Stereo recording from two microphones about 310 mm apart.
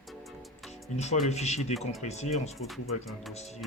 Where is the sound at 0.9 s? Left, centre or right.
Left.